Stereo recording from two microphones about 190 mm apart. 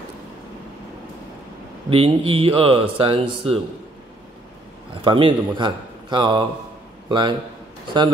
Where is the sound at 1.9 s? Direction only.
30° right (ahead or behind).